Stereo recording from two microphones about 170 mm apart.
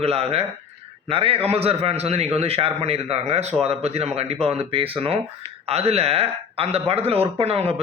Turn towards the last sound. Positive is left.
turn(degrees=-35)  # may be behind; listen again after turning